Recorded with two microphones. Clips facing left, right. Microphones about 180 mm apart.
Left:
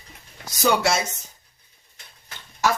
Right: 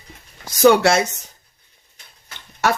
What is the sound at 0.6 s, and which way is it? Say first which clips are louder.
Speech: right 8 dB; 60° right (ahead or behind).